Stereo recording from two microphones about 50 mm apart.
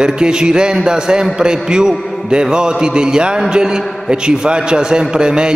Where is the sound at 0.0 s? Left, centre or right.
Centre.